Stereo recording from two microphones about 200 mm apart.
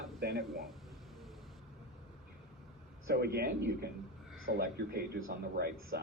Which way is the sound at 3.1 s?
50° right (ahead or behind).